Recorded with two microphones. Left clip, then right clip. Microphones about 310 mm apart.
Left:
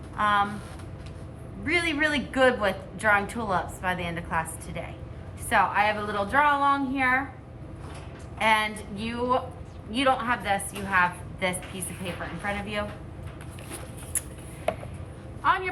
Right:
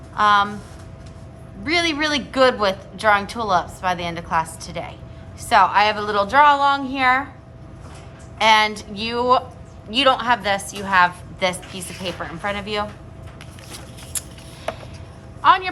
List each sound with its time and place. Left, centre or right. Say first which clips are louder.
0.2 s a woman's voice: right 8 dB; centre
1.6 s a woman's voice: right 5 dB; centre
8.4 s a woman's voice: right 8 dB; centre
15.4 s a woman's voice: right 9 dB; centre